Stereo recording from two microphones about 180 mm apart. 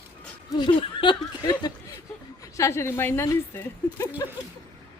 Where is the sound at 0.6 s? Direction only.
25° left (ahead or behind).